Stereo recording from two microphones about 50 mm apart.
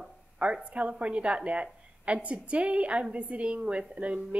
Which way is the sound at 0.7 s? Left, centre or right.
Right.